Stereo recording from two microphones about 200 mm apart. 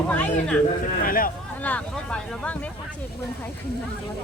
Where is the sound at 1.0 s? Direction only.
45° left (ahead or behind).